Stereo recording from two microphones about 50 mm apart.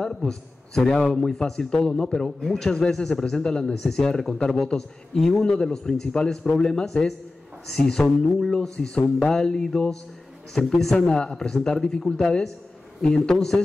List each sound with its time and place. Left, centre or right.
0.0 s a man's voice: centre
8.3 s a man's voice: centre
8.5 s a man's voice: centre
11.1 s a man's voice: centre